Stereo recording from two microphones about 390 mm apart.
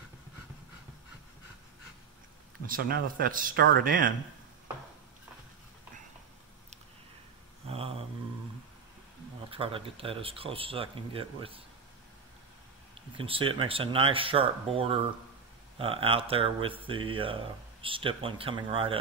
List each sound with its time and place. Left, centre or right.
2.6 s speech: right
7.6 s a sound: centre
9.5 s speech: centre
13.2 s speech: centre